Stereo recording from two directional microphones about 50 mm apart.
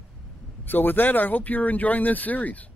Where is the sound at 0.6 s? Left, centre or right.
Left.